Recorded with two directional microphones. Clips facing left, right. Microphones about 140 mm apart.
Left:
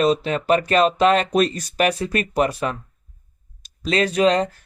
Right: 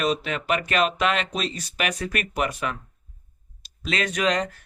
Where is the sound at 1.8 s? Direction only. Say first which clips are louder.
Left 7 dB; 30° left (ahead or behind).